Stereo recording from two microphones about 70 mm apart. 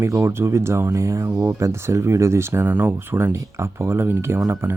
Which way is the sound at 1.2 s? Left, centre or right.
Right.